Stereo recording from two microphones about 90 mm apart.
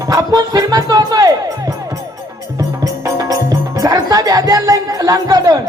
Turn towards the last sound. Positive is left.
turn(degrees=-45)  # may be behind; listen again after turning